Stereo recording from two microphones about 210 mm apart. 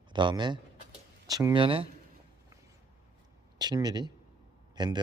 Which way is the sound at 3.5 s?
20° right (ahead or behind).